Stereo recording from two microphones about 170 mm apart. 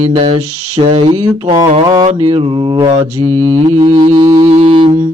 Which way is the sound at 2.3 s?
30° right (ahead or behind).